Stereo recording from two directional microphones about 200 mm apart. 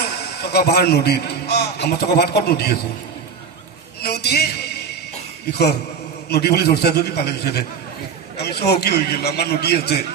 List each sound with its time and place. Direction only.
0.2 s a man's voice: 55° left (ahead or behind)
4.0 s a sound: 55° left (ahead or behind)
6.2 s a man's voice: 55° left (ahead or behind)